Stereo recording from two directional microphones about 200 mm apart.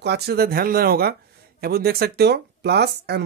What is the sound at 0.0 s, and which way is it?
Speech, 55° right (ahead or behind).